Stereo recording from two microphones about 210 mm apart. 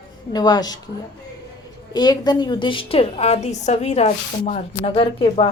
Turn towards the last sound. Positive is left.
turn(degrees=25)  # may be behind; listen again after turning